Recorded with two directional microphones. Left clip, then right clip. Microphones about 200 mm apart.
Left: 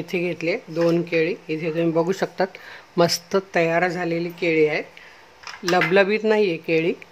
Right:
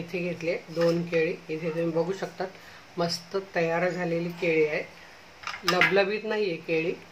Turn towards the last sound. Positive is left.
turn(degrees=45)  # may be behind; listen again after turning